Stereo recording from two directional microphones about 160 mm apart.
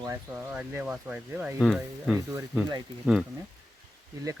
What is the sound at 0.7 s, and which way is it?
Speech, 5° right (ahead or behind).